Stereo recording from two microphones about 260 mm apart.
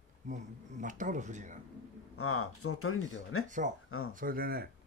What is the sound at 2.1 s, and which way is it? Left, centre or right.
Speech, left.